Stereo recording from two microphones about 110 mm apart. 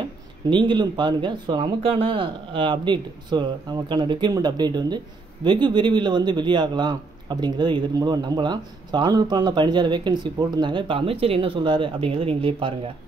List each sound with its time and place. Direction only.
0.5 s speech: 45° right (ahead or behind)